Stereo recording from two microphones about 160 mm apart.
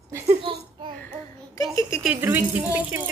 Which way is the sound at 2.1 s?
15° right (ahead or behind).